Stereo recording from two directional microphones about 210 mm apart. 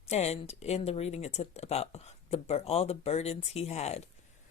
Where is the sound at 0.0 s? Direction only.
30° left (ahead or behind).